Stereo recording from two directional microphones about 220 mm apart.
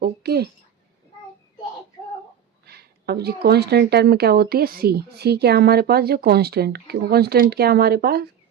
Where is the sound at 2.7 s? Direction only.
45° right (ahead or behind).